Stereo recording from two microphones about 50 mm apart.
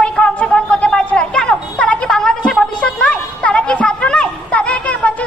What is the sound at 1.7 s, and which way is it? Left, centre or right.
Music, left.